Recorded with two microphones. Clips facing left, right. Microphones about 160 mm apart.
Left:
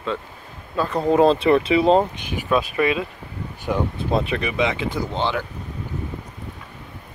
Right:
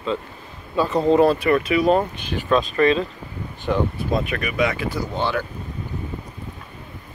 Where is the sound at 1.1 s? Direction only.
20° left (ahead or behind).